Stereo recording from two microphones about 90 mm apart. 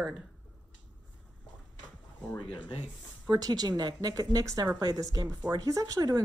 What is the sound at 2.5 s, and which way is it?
Speech, 70° left (ahead or behind).